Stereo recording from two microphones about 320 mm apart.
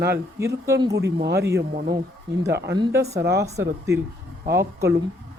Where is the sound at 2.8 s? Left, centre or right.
Centre.